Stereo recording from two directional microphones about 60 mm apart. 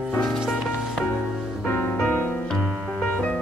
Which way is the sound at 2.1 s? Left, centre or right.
Left.